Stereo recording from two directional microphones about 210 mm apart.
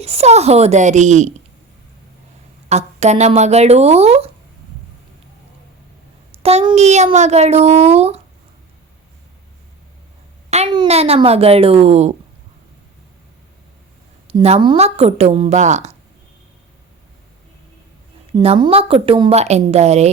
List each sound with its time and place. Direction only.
0.0 s a child's voice: 30° right (ahead or behind)
2.6 s a child's voice: 30° right (ahead or behind)
6.4 s a child's voice: 30° right (ahead or behind)
10.5 s a woman's voice: 25° right (ahead or behind)
14.3 s a woman's voice: 30° right (ahead or behind)
18.3 s a woman's voice: 25° right (ahead or behind)